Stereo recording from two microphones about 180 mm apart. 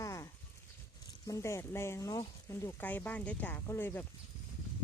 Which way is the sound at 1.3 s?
15° left (ahead or behind).